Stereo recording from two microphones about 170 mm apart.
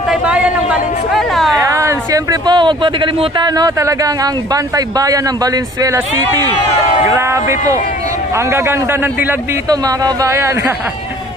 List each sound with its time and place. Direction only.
0.1 s a sound: 5° right (ahead or behind)
1.6 s a man's voice: 20° right (ahead or behind)
7.2 s a man's voice: 15° right (ahead or behind)